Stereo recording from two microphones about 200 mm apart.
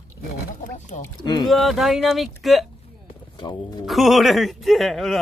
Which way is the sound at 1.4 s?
Centre (ahead or behind).